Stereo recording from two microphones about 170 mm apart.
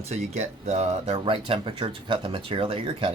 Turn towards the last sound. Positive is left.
turn(degrees=-35)  # may be behind; listen again after turning